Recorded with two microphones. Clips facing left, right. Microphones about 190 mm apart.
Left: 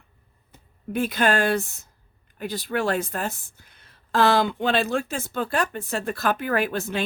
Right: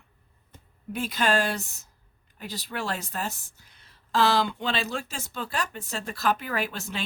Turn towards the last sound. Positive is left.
turn(degrees=55)  # may be behind; listen again after turning